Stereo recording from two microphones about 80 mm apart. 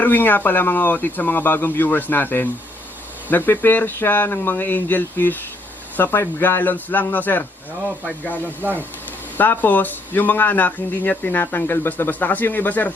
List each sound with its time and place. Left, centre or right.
0.0 s speech: left
9.4 s speech: left